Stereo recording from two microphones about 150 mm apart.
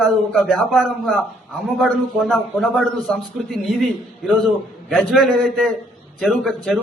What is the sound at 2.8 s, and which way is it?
Speech, 10° left (ahead or behind).